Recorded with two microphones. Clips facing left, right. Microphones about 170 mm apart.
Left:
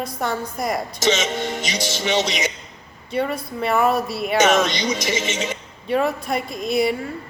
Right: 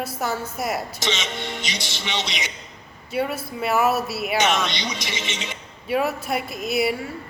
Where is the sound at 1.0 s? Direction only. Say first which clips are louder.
Left 7 dB; 45° left (ahead or behind).